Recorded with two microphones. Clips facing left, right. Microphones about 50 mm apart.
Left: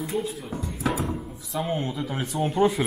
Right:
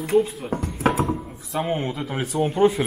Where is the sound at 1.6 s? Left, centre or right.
Right; by 2.9 s centre.